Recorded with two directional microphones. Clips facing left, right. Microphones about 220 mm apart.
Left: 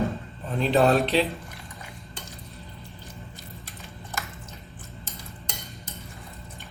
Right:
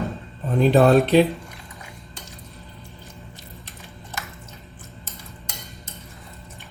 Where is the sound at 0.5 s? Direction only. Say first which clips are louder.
Right 5 dB; 50° right (ahead or behind).